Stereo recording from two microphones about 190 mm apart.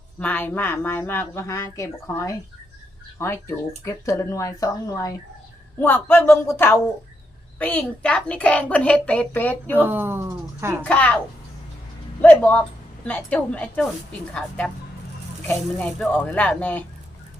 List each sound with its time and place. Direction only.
0.2 s a woman's voice: 10° left (ahead or behind)
9.7 s speech: 10° right (ahead or behind)
10.8 s a woman's voice: 5° left (ahead or behind)
12.2 s a woman's voice: 10° left (ahead or behind)